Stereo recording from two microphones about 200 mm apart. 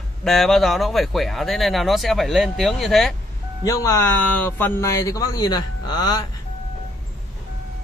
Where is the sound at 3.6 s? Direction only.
15° left (ahead or behind).